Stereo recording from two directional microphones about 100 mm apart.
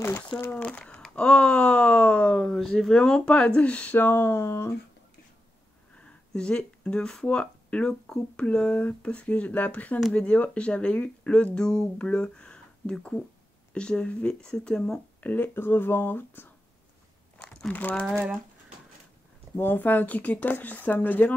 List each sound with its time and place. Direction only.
0.3 s speech: 15° left (ahead or behind)
5.9 s speech: 10° left (ahead or behind)
17.4 s crumpling: 10° left (ahead or behind)
19.5 s speech: 20° left (ahead or behind)